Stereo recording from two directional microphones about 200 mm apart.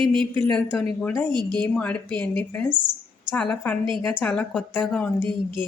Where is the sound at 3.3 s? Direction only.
5° left (ahead or behind).